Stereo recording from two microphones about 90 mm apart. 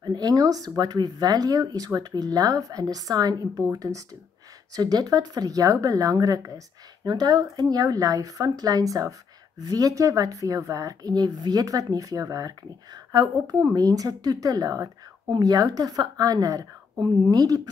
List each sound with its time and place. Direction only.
0.0 s speech: 50° right (ahead or behind)
7.1 s speech: 50° right (ahead or behind)